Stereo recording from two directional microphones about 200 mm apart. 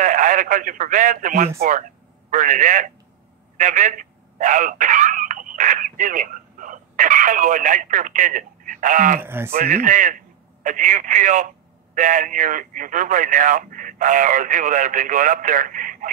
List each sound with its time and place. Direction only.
0.0 s speech: 40° right (ahead or behind)
3.5 s telephone: 40° right (ahead or behind)
9.2 s speech: 10° right (ahead or behind)
9.5 s speech: 45° right (ahead or behind)